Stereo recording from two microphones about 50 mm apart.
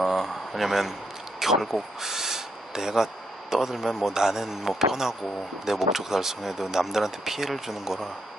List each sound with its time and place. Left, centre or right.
0.0 s speech: centre